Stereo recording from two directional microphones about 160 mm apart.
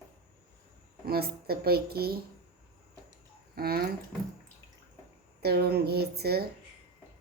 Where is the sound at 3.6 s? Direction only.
70° right (ahead or behind).